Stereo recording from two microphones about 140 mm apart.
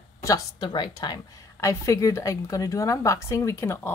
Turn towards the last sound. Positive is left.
turn(degrees=15)  # may be behind; listen again after turning